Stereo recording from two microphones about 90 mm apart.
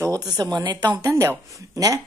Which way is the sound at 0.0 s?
45° right (ahead or behind).